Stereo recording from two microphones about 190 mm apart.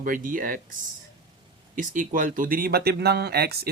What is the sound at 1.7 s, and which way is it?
Speech, 45° right (ahead or behind).